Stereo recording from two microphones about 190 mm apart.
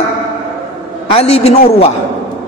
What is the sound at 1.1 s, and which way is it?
Speech, 30° left (ahead or behind).